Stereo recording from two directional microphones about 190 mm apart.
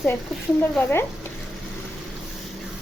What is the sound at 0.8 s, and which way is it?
Speech, 10° left (ahead or behind).